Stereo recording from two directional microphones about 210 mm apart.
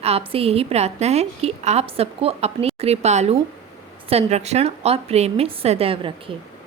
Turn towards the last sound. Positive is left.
turn(degrees=-25)  # may be behind; listen again after turning